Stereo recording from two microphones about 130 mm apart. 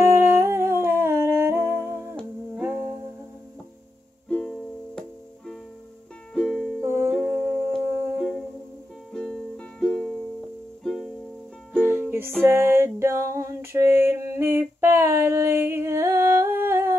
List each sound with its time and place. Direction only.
0.0 s humming: 20° right (ahead or behind)
2.5 s music: 10° right (ahead or behind)
4.3 s music: 10° left (ahead or behind)
6.3 s music: centre (ahead or behind)
6.8 s humming: 20° right (ahead or behind)
8.2 s music: centre (ahead or behind)
11.8 s music: 15° right (ahead or behind)
12.4 s a sound: 20° right (ahead or behind)